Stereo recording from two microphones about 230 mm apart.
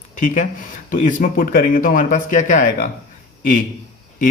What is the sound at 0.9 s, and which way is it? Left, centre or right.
Speech, left.